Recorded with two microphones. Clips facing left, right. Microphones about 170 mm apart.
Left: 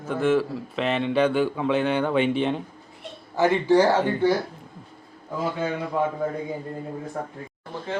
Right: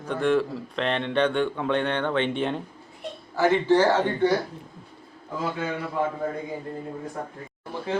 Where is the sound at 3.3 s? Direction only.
15° left (ahead or behind).